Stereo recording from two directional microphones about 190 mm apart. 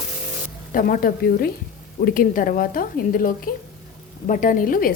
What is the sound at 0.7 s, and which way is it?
A woman's voice, 50° left (ahead or behind).